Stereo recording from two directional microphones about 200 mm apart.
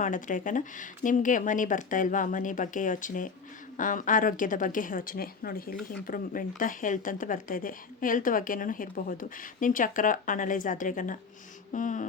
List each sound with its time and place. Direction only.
0.0 s a woman's voice: 40° left (ahead or behind)